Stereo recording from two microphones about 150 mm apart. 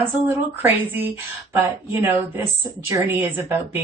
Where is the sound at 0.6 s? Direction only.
10° right (ahead or behind).